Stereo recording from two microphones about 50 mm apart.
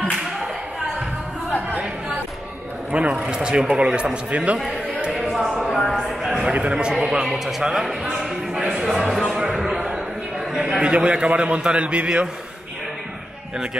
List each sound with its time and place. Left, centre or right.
2.9 s a man's voice: right
5.1 s a sound: centre
6.4 s a man's voice: centre
7.2 s speech: centre
8.5 s speech: centre
9.3 s basketball bounce: centre
9.6 s a sound: centre
10.8 s a man's voice: right